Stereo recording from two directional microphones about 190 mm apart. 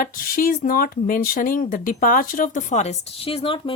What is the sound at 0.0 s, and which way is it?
Speech, 50° left (ahead or behind).